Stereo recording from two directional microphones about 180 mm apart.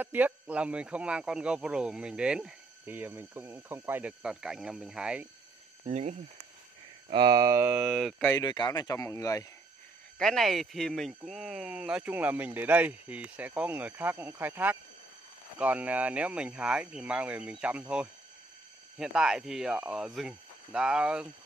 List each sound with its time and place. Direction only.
0.0 s speech: 10° right (ahead or behind)
5.9 s speech: 40° right (ahead or behind)
7.1 s speech: 25° right (ahead or behind); by 8.3 s centre (ahead or behind)
8.3 s speech: 20° left (ahead or behind)
10.1 s speech: centre (ahead or behind)